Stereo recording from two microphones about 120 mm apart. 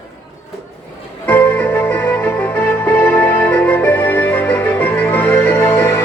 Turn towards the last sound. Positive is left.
turn(degrees=15)  # may be behind; listen again after turning